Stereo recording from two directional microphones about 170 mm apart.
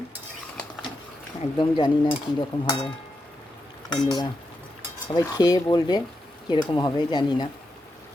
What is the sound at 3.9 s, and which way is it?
Speech, 25° left (ahead or behind).